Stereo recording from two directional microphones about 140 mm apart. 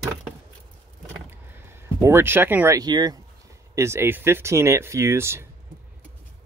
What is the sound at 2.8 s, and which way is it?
Speech, 30° right (ahead or behind).